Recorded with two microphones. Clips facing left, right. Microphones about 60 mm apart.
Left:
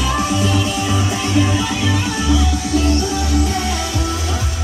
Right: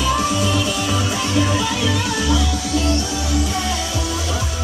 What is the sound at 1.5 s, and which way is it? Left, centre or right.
Music, left.